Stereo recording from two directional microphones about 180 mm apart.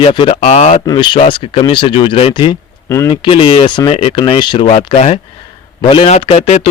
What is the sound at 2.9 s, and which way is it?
Speech, 15° left (ahead or behind).